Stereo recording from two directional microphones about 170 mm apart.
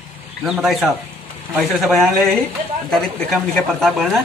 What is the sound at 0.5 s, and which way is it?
Speech, centre (ahead or behind).